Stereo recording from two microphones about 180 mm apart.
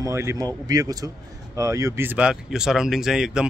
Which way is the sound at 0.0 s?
15° right (ahead or behind).